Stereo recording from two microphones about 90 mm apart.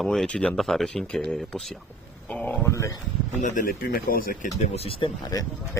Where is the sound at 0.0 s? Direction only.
5° left (ahead or behind).